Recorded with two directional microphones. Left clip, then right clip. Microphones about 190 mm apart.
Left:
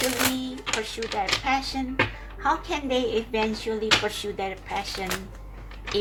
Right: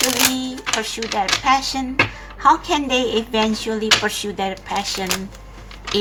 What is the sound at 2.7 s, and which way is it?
Speech, 20° right (ahead or behind).